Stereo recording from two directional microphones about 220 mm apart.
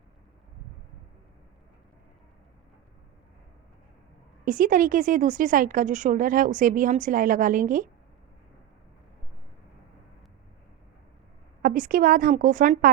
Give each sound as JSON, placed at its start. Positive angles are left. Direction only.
{"t": 4.4, "sound": "speech", "side_deg": -40}
{"t": 11.6, "sound": "speech", "side_deg": -40}